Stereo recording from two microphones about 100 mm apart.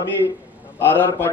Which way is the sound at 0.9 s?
20° left (ahead or behind).